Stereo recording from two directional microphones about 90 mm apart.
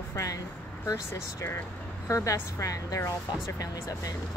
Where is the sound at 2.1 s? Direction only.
35° left (ahead or behind).